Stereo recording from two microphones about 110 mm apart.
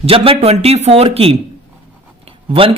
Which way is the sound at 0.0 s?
65° right (ahead or behind).